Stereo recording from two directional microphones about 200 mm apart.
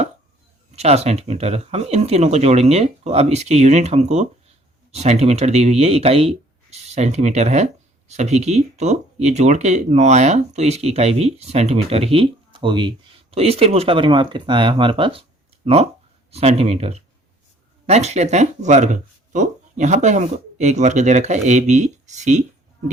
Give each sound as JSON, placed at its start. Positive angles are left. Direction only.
{"t": 0.8, "sound": "speech", "side_deg": -35}